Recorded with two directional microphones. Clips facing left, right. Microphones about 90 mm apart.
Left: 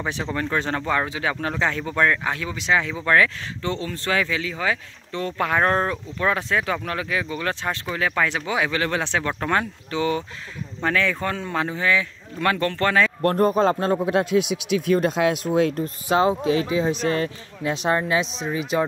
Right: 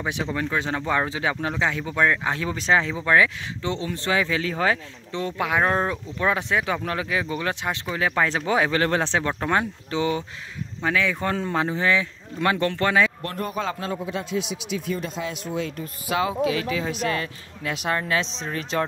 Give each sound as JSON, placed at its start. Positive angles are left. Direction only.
{"t": 0.0, "sound": "speech", "side_deg": -10}
{"t": 1.0, "sound": "speech", "side_deg": -25}
{"t": 1.3, "sound": "speech", "side_deg": -10}
{"t": 2.2, "sound": "speech", "side_deg": -25}
{"t": 3.0, "sound": "speech", "side_deg": -15}
{"t": 4.4, "sound": "speech", "side_deg": -35}
{"t": 5.4, "sound": "speech", "side_deg": -10}
{"t": 10.8, "sound": "speech", "side_deg": -10}
{"t": 11.2, "sound": "speech", "side_deg": -25}
{"t": 13.2, "sound": "a man's voice", "side_deg": 40}
{"t": 14.0, "sound": "speech", "side_deg": 60}
{"t": 15.7, "sound": "speech", "side_deg": 35}
{"t": 18.2, "sound": "speech", "side_deg": 10}